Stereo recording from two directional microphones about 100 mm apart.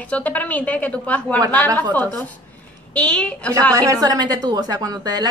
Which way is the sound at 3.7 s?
35° right (ahead or behind).